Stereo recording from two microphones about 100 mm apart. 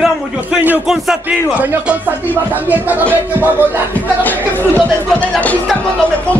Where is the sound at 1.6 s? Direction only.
20° right (ahead or behind).